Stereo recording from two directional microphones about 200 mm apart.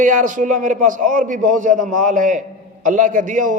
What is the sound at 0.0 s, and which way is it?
A man's voice, 40° right (ahead or behind).